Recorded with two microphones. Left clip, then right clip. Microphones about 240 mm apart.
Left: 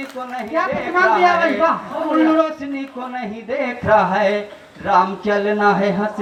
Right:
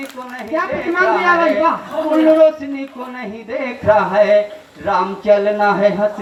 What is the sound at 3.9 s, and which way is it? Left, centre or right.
A man's voice, centre.